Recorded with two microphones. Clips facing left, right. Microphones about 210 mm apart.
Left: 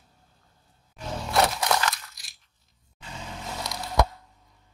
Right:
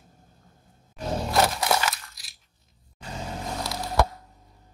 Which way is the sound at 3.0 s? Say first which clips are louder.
Right 5 dB; 40° right (ahead or behind).